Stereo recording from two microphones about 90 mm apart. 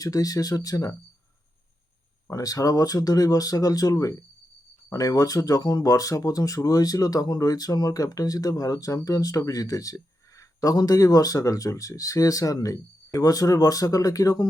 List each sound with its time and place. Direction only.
0.0 s speech: 40° left (ahead or behind)
2.3 s speech: 40° left (ahead or behind)